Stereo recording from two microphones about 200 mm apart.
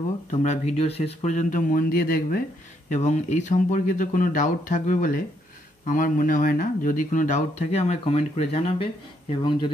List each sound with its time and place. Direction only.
0.3 s speech: 35° left (ahead or behind)
2.9 s speech: 35° left (ahead or behind)